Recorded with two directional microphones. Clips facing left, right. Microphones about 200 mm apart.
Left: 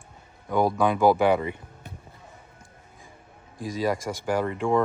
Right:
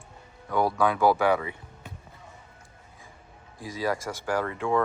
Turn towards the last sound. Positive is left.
turn(degrees=15)  # may be behind; listen again after turning